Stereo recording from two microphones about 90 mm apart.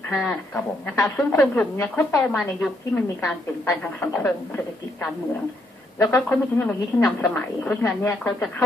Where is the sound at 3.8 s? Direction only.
20° left (ahead or behind).